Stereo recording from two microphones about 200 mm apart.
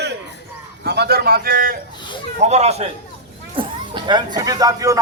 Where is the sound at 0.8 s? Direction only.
55° right (ahead or behind).